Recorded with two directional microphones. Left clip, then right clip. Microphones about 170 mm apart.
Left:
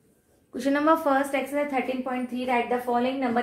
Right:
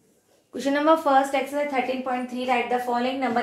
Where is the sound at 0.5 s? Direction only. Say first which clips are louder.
Right 2 dB; 25° left (ahead or behind).